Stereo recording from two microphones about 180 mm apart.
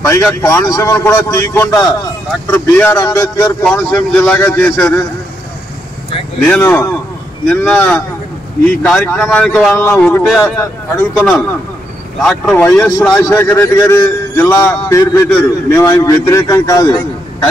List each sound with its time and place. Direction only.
0.0 s a man's voice: 15° left (ahead or behind)
3.6 s a man's voice: 10° left (ahead or behind)
6.4 s a man's voice: 10° left (ahead or behind)